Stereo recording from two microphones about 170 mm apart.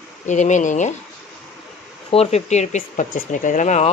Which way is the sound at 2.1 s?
40° left (ahead or behind).